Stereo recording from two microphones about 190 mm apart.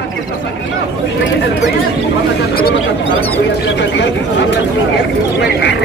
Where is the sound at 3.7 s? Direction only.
70° left (ahead or behind).